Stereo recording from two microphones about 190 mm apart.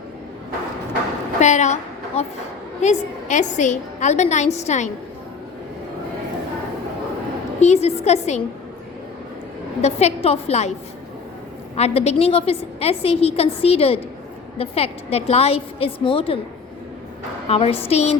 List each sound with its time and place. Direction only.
1.4 s a woman's voice: 40° left (ahead or behind)
7.6 s a woman's voice: 35° left (ahead or behind)
9.8 s a woman's voice: 35° left (ahead or behind)
11.8 s a woman's voice: 35° left (ahead or behind)
17.5 s a woman's voice: 30° left (ahead or behind)